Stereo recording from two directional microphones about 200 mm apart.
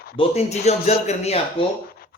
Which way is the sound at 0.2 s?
35° left (ahead or behind).